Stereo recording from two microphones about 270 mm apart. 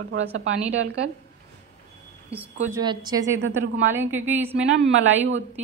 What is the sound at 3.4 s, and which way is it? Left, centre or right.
Speech, right.